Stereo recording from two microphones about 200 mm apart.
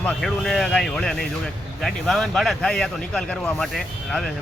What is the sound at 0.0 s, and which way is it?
Speech, centre (ahead or behind).